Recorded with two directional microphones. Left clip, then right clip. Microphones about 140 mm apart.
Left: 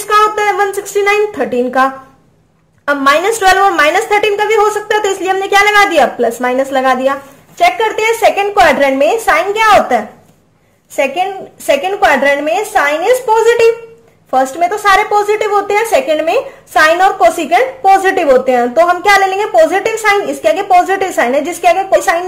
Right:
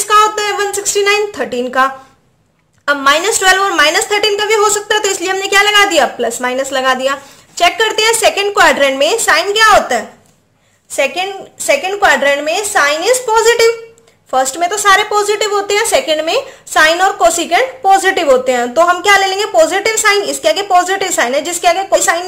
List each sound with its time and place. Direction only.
0.4 s a woman's voice: 20° right (ahead or behind)
13.3 s speech: 25° right (ahead or behind)
14.7 s speech: 35° right (ahead or behind)